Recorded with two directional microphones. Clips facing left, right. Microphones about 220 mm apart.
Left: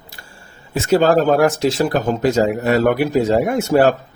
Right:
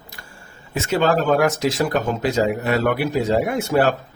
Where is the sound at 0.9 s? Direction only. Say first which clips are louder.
Left 5 dB; 40° left (ahead or behind).